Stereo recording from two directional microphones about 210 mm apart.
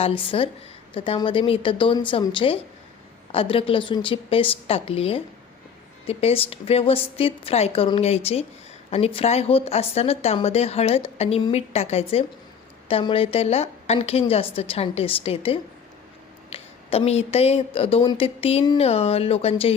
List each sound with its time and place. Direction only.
0.0 s speech: 25° left (ahead or behind)